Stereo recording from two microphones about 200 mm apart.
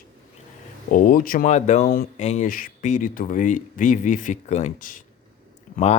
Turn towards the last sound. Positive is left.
turn(degrees=30)  # may be behind; listen again after turning